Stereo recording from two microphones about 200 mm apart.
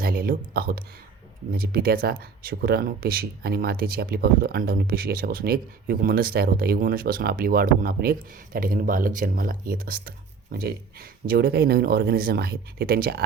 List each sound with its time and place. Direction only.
0.0 s speech: 45° right (ahead or behind)